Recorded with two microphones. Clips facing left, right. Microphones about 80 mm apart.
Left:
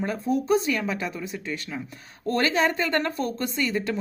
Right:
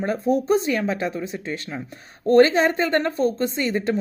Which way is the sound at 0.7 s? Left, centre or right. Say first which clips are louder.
Right 4 dB; right.